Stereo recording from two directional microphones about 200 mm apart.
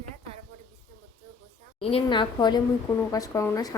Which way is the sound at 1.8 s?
25° left (ahead or behind).